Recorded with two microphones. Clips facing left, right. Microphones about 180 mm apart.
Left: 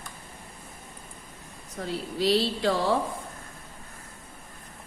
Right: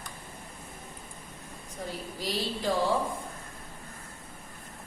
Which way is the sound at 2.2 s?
70° left (ahead or behind).